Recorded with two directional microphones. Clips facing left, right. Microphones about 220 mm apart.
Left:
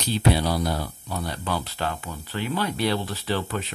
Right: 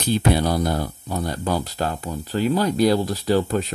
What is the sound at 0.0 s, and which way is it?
Speech, 50° right (ahead or behind).